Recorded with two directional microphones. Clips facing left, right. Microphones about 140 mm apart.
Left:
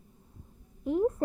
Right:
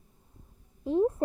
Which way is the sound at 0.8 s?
25° right (ahead or behind).